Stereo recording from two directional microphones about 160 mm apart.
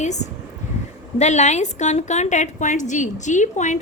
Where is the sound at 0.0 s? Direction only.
45° left (ahead or behind).